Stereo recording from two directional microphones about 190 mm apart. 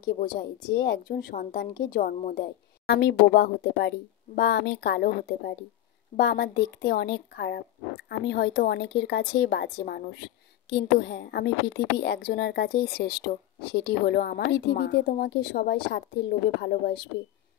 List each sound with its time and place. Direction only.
0.0 s speech: 55° left (ahead or behind)